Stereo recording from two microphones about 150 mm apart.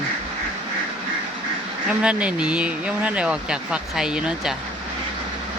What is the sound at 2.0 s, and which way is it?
Speech, 10° right (ahead or behind).